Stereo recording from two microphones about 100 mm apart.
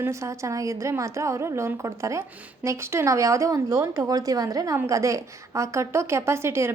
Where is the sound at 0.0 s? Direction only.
30° right (ahead or behind).